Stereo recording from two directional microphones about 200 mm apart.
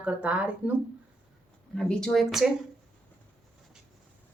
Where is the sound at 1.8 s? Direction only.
5° left (ahead or behind).